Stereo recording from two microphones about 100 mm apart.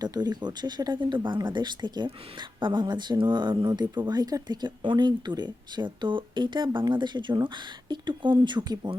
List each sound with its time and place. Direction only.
0.0 s speech: 45° right (ahead or behind)